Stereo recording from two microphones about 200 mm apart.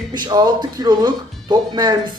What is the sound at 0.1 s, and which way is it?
Speech, 20° right (ahead or behind).